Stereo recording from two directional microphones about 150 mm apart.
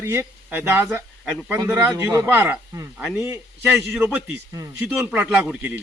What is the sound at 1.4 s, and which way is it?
Speech, 5° right (ahead or behind).